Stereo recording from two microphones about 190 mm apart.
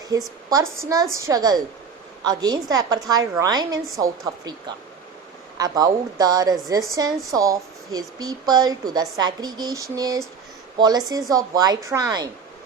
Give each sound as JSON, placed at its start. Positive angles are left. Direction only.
{"t": 0.1, "sound": "a woman's voice", "side_deg": -20}